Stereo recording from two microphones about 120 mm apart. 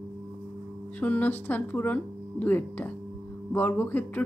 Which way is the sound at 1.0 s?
10° left (ahead or behind).